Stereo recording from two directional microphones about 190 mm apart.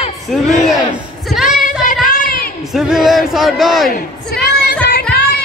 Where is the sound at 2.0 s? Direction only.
45° left (ahead or behind).